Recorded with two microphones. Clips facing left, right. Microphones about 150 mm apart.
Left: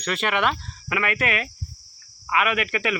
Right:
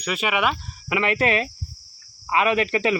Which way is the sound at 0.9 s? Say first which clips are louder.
Right 4 dB; 25° right (ahead or behind).